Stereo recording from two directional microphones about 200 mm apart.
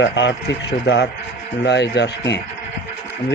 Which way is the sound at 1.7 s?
60° left (ahead or behind).